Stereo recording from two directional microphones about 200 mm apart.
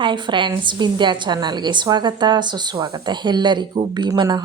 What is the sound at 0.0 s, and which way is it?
A woman's voice, 25° right (ahead or behind).